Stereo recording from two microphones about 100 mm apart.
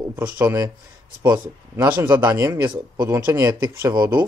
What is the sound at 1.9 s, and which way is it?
Speech, 20° right (ahead or behind).